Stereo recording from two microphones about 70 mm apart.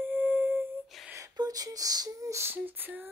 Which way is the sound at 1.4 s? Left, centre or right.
Right.